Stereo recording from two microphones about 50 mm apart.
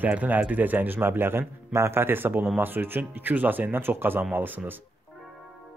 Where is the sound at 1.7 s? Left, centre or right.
Right.